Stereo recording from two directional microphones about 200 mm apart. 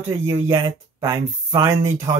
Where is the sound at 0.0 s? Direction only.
15° right (ahead or behind).